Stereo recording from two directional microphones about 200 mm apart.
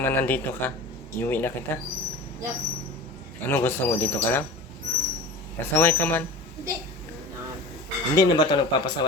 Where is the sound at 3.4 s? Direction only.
10° left (ahead or behind).